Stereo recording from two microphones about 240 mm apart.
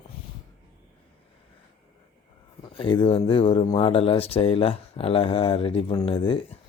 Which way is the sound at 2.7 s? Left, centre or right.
Left.